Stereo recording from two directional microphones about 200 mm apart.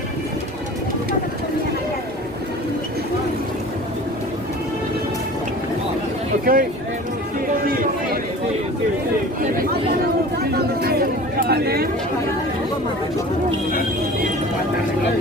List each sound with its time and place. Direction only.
6.4 s speech: 45° right (ahead or behind)
7.6 s a sound: 45° right (ahead or behind)
10.8 s chatter: 50° right (ahead or behind)